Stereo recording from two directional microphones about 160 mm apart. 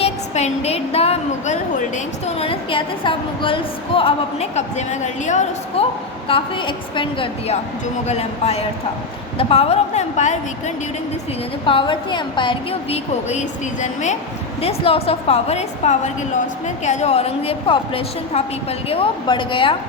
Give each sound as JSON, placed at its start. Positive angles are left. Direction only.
{"t": 0.0, "sound": "a woman's voice", "side_deg": 40}
{"t": 6.2, "sound": "a woman's voice", "side_deg": 30}
{"t": 11.6, "sound": "a woman's voice", "side_deg": 30}
{"t": 13.8, "sound": "a woman's voice", "side_deg": 50}
{"t": 14.6, "sound": "a woman's voice", "side_deg": 40}